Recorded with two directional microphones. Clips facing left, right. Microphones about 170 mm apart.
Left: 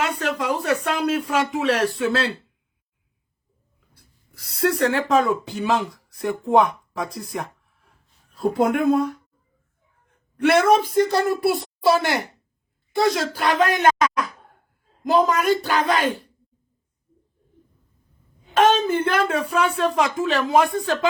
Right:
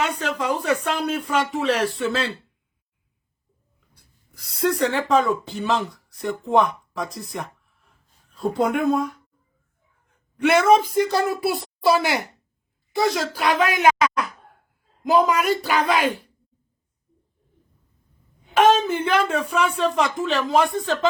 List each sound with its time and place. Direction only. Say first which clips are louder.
0.0 s a sound: even; 5° left (ahead or behind)
0.6 s speech: left 1 dB; centre (ahead or behind)
3.9 s a sound: left 1 dB; centre (ahead or behind)
5.2 s speech: left 1 dB; 15° left (ahead or behind)
6.2 s speech: left 2 dB; 15° left (ahead or behind)
8.4 s speech: left 2 dB; 5° left (ahead or behind)
10.4 s speech: even; centre (ahead or behind)
18.5 s speech: even; centre (ahead or behind)